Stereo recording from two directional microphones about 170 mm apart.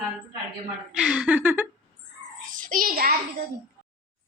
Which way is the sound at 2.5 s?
50° right (ahead or behind).